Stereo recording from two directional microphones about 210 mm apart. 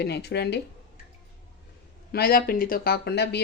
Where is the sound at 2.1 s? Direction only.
45° left (ahead or behind).